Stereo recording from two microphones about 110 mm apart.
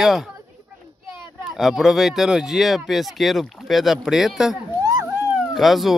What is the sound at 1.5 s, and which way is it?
Speech, 5° right (ahead or behind).